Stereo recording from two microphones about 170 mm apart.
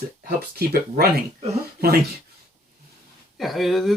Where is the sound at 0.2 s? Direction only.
60° right (ahead or behind).